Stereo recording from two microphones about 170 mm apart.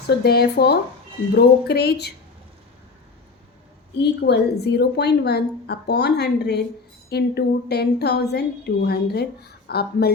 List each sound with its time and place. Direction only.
0.2 s a woman's voice: 70° left (ahead or behind)
4.0 s a woman's voice: 75° left (ahead or behind)